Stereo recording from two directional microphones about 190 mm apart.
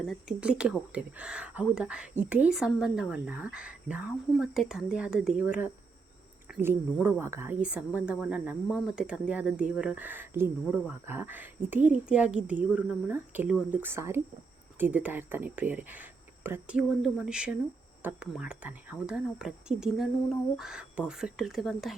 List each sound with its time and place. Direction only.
0.0 s speech: centre (ahead or behind)